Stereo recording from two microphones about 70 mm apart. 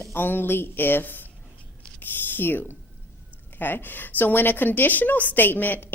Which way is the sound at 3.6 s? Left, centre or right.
Left.